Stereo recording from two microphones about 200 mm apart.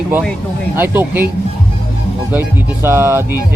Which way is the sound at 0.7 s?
10° right (ahead or behind).